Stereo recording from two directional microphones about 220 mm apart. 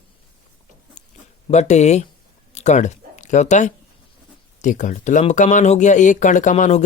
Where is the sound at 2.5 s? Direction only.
30° left (ahead or behind).